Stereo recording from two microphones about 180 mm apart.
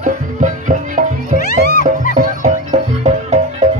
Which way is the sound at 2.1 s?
45° right (ahead or behind).